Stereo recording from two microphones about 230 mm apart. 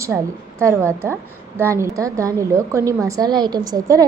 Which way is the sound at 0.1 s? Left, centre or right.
Centre.